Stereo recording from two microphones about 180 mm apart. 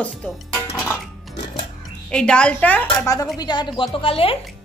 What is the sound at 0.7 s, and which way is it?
Music, centre (ahead or behind).